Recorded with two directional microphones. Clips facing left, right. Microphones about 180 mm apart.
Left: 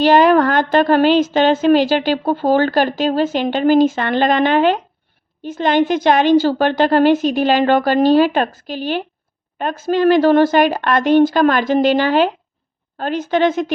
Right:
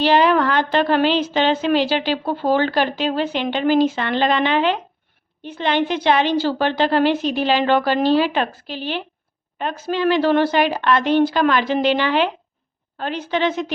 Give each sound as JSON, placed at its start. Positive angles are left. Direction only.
{"t": 0.0, "sound": "a woman's voice", "side_deg": 45}